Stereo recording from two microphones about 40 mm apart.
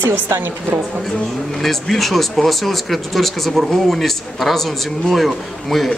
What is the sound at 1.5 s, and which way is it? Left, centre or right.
Speech, centre.